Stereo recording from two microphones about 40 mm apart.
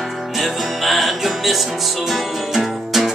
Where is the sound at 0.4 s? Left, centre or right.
Centre.